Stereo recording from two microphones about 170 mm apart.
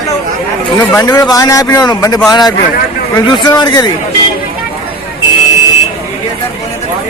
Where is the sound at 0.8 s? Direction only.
20° left (ahead or behind).